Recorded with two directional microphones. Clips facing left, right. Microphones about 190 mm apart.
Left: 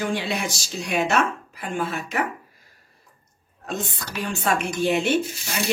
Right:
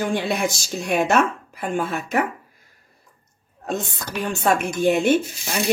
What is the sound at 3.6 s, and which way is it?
Speech, 50° right (ahead or behind).